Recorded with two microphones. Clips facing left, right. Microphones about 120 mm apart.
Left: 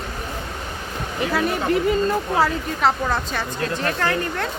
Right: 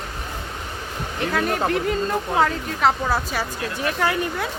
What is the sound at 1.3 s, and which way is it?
A woman's voice, centre (ahead or behind).